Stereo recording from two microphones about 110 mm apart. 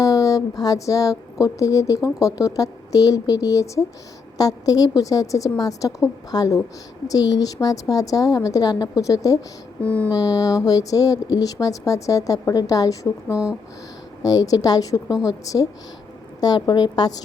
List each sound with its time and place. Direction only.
0.0 s a woman's voice: 30° left (ahead or behind)
9.8 s a sound: 15° left (ahead or behind)
10.1 s a woman's voice: 35° left (ahead or behind)
13.3 s speech: 10° right (ahead or behind)
14.3 s a woman's voice: 35° left (ahead or behind)